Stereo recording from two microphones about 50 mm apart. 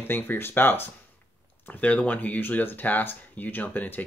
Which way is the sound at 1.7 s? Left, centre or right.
Left.